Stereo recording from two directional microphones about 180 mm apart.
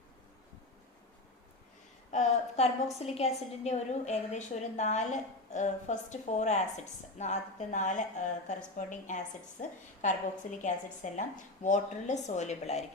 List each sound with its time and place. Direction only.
2.1 s a woman's voice: 40° left (ahead or behind)